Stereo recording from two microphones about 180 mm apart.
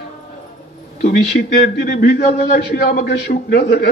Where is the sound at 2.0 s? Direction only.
60° left (ahead or behind).